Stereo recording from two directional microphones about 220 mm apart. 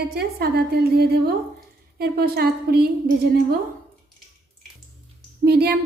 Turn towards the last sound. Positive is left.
turn(degrees=-45)  # may be behind; listen again after turning